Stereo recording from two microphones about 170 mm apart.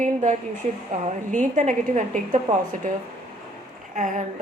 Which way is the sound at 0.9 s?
45° right (ahead or behind).